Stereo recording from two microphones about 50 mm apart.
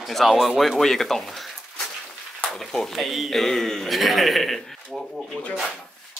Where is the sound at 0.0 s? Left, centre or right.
Centre.